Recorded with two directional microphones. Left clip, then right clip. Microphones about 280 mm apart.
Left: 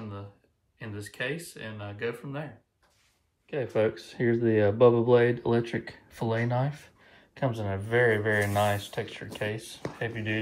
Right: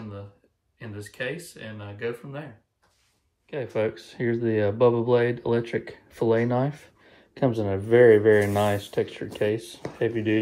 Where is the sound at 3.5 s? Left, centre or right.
Left.